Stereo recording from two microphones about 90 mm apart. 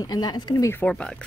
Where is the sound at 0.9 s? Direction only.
10° left (ahead or behind).